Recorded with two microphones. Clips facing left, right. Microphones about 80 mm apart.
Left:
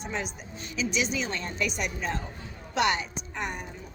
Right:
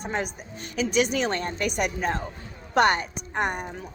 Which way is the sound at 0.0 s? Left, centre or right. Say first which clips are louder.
Right 4 dB; right.